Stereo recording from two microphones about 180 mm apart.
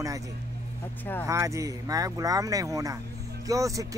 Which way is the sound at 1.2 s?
15° right (ahead or behind).